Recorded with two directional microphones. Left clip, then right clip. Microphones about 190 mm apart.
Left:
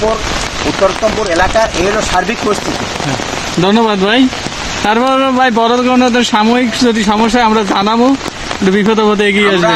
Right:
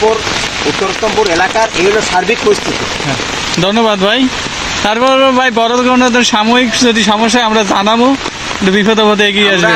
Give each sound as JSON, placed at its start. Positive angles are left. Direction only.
{"t": 3.7, "sound": "speech", "side_deg": 20}